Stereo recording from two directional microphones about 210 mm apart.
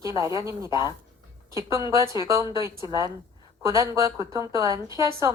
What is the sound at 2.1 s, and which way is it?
A woman's voice, 15° right (ahead or behind).